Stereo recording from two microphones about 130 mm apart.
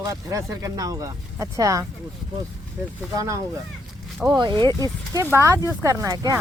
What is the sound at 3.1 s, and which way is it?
Speech, 25° right (ahead or behind).